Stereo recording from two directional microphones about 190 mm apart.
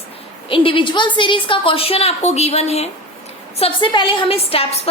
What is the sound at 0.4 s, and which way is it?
A woman's voice, 30° left (ahead or behind).